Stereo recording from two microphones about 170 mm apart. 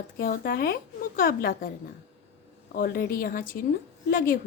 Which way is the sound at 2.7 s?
55° left (ahead or behind).